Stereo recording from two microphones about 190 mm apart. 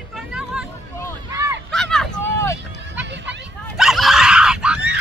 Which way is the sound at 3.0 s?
70° right (ahead or behind).